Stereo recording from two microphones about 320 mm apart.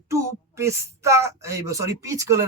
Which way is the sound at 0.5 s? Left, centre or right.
Centre.